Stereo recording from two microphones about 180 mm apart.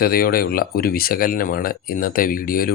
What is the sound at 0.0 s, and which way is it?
Speech, 55° left (ahead or behind).